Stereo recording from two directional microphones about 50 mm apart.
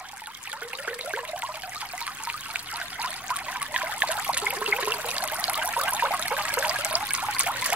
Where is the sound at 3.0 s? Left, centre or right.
Right.